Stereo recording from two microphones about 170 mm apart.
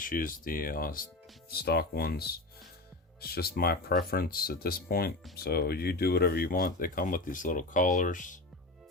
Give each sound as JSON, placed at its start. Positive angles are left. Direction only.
{"t": 0.0, "sound": "speech", "side_deg": 55}